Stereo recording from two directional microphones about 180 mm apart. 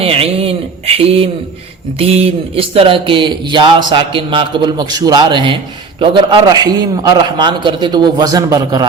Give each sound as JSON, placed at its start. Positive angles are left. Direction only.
{"t": 0.0, "sound": "speech", "side_deg": -30}